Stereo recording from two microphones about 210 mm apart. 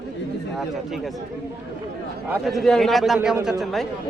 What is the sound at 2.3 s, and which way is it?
Speech, centre (ahead or behind).